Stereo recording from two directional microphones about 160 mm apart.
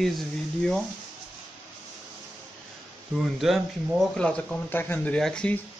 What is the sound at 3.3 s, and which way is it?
Speech, centre (ahead or behind).